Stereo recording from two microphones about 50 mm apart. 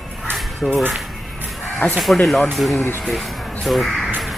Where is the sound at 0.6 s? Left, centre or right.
Centre.